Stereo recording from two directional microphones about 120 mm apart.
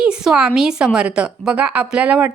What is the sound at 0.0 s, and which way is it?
A woman's voice, 5° right (ahead or behind).